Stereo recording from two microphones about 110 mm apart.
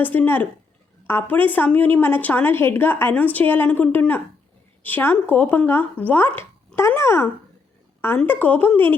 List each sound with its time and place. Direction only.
0.0 s a woman's voice: 15° left (ahead or behind)